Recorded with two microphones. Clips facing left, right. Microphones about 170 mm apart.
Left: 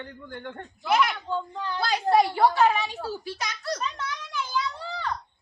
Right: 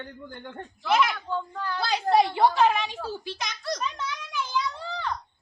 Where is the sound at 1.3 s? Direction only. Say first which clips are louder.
Left 1 dB; 20° left (ahead or behind).